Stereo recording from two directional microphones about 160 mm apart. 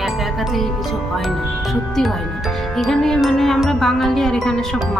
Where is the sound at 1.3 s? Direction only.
Centre (ahead or behind).